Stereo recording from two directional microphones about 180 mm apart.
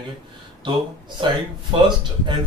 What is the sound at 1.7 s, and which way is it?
Mantra, 25° right (ahead or behind).